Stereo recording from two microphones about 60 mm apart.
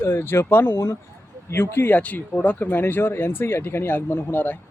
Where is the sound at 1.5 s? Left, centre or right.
Left.